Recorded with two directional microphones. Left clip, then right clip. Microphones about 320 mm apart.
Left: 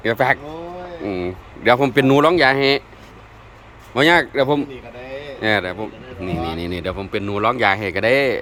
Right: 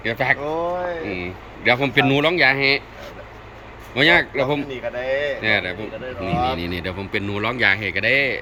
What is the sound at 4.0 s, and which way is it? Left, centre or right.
A man's voice, centre.